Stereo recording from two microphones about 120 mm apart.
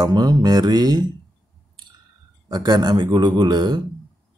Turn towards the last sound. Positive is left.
turn(degrees=-35)  # may be behind; listen again after turning